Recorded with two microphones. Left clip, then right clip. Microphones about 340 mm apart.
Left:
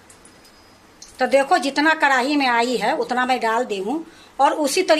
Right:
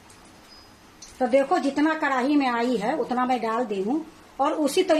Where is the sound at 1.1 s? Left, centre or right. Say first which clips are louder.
Left 4 dB; left.